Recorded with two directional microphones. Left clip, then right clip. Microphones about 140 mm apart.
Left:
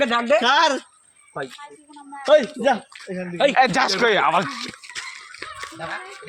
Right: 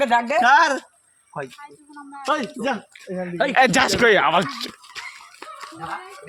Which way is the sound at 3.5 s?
70° right (ahead or behind).